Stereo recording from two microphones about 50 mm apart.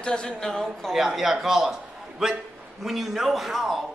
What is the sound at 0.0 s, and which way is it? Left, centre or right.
Speech, centre.